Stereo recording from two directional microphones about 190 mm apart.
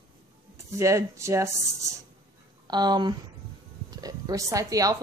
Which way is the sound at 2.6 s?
20° right (ahead or behind).